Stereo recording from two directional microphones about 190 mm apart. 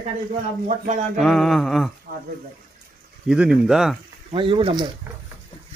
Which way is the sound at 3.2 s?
5° right (ahead or behind).